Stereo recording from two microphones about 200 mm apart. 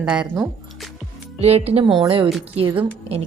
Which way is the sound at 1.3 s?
30° right (ahead or behind).